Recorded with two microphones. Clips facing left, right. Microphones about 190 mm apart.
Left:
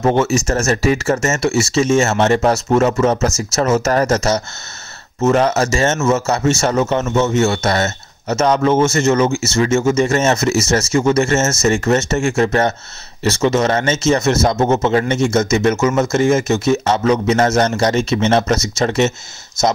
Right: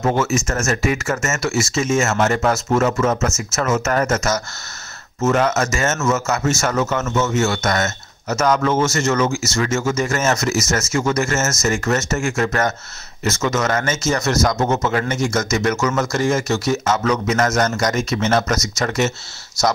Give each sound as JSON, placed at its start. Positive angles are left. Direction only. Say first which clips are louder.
{"t": 0.0, "sound": "a man's voice", "louder": "left 4 dB", "side_deg": 25}